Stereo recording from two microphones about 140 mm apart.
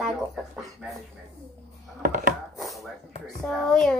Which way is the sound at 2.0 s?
75° right (ahead or behind).